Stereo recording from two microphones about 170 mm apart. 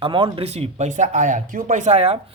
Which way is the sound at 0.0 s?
30° right (ahead or behind).